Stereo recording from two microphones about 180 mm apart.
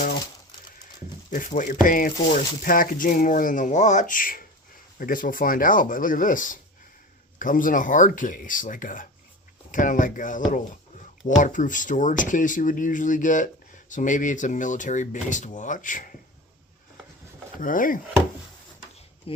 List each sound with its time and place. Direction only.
1.3 s speech: 45° left (ahead or behind)
17.6 s speech: 50° left (ahead or behind)